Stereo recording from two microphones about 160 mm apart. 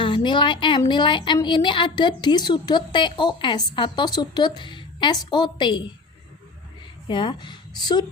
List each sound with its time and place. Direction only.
0.0 s a woman's voice: 30° left (ahead or behind)
7.1 s a woman's voice: 30° left (ahead or behind)